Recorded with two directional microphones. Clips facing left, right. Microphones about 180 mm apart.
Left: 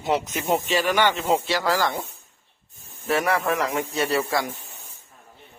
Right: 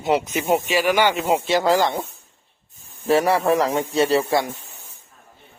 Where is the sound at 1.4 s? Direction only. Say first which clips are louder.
Right 5 dB; 20° right (ahead or behind).